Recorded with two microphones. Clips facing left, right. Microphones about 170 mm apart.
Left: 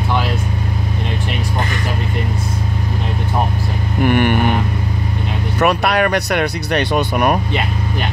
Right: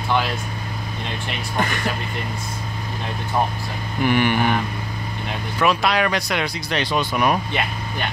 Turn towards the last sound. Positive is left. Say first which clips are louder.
# left 4 dB
turn(degrees=55)  # may be behind; listen again after turning